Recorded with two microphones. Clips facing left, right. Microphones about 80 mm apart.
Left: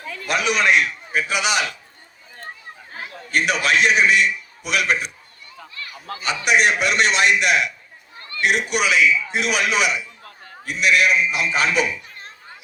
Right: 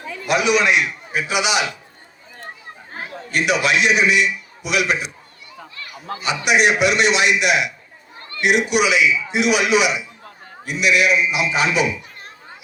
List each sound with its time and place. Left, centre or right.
0.3 s a man's voice: left
3.3 s a man's voice: left
6.1 s a man's voice: left